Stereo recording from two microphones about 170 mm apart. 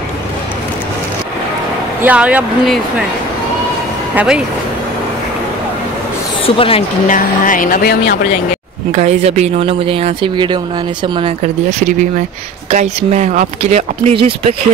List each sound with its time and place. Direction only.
2.0 s speech: 10° right (ahead or behind)
4.1 s speech: 10° right (ahead or behind)
6.4 s a woman's voice: 35° left (ahead or behind)
7.1 s speech: 50° left (ahead or behind)
8.9 s speech: 40° right (ahead or behind)
12.7 s speech: 45° right (ahead or behind)